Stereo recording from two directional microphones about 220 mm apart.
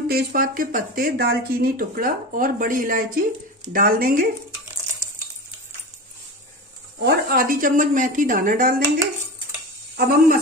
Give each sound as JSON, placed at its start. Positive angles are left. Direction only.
{"t": 0.1, "sound": "speech", "side_deg": -45}
{"t": 7.0, "sound": "speech", "side_deg": -45}